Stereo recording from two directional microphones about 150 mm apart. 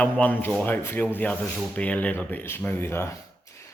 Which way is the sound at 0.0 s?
10° left (ahead or behind).